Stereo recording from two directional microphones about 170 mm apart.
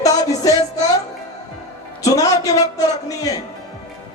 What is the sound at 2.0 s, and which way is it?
Speech, 20° left (ahead or behind).